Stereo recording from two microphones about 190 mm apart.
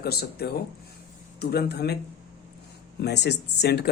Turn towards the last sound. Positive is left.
turn(degrees=60)  # may be behind; listen again after turning